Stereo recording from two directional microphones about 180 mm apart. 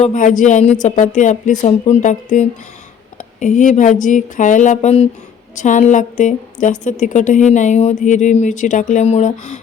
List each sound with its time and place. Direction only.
0.0 s a woman's voice: 45° left (ahead or behind)